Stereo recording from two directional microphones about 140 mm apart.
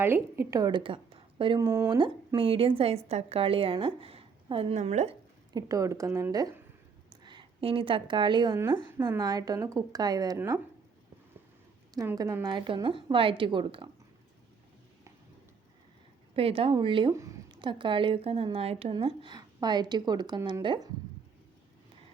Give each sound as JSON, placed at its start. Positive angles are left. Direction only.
{"t": 0.0, "sound": "a woman's voice", "side_deg": -15}
{"t": 0.7, "sound": "speech", "side_deg": -35}
{"t": 1.5, "sound": "a woman's voice", "side_deg": -20}
{"t": 1.9, "sound": "a woman's voice", "side_deg": -35}
{"t": 4.8, "sound": "speech", "side_deg": -55}
{"t": 5.5, "sound": "a woman's voice", "side_deg": -25}
{"t": 7.1, "sound": "a woman's voice", "side_deg": -35}
{"t": 10.3, "sound": "speech", "side_deg": -15}
{"t": 11.9, "sound": "a woman's voice", "side_deg": -25}
{"t": 16.3, "sound": "a woman's voice", "side_deg": -40}